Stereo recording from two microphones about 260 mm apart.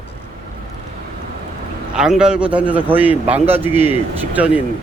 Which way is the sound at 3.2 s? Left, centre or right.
Right.